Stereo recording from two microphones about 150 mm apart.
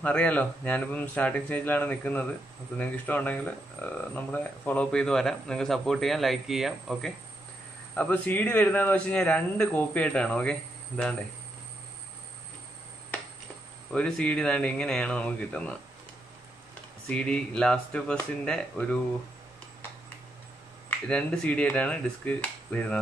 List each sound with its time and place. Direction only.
0.0 s a man's voice: 10° left (ahead or behind)
7.9 s a man's voice: 10° left (ahead or behind)
13.9 s a man's voice: 5° left (ahead or behind)
17.1 s speech: 5° left (ahead or behind)
21.1 s a man's voice: 10° left (ahead or behind)